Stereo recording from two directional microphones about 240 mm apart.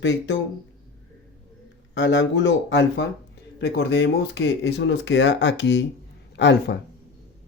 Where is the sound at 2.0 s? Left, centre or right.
Left.